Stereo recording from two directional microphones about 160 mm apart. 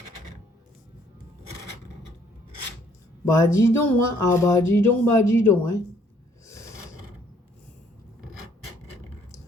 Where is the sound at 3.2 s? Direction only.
15° left (ahead or behind).